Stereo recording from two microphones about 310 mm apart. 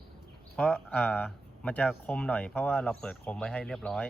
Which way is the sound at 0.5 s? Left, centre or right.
Centre.